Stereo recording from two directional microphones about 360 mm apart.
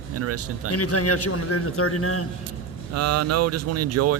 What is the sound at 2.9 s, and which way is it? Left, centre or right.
Speech, right.